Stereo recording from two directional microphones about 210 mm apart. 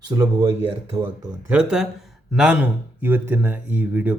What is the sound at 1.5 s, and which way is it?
Speech, 5° right (ahead or behind).